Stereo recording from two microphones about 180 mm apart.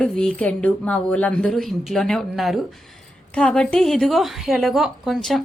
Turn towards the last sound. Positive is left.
turn(degrees=0)  # may be behind; listen again after turning